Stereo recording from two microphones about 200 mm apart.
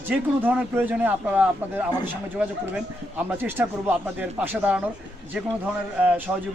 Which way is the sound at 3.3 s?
10° right (ahead or behind).